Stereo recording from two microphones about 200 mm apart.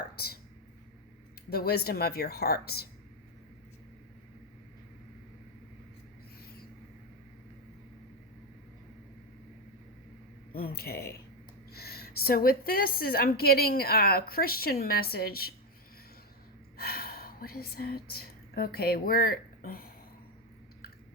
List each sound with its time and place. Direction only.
1.5 s a woman's voice: 50° left (ahead or behind)
10.5 s a woman's voice: 50° left (ahead or behind)
16.7 s a woman's voice: 50° left (ahead or behind)